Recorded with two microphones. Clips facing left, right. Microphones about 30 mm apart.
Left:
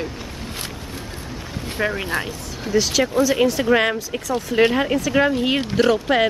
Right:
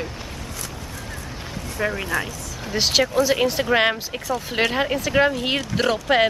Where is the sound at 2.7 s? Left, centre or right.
Right.